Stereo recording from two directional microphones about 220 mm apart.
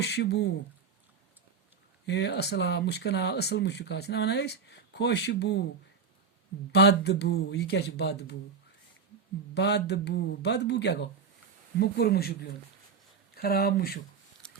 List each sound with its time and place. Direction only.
0.0 s speech: 50° left (ahead or behind)
2.0 s speech: 50° left (ahead or behind)
6.7 s speech: 50° left (ahead or behind)
9.6 s speech: 50° left (ahead or behind)
14.4 s a sound: 5° left (ahead or behind)